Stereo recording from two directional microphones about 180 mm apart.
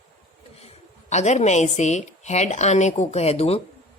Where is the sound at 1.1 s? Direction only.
40° left (ahead or behind).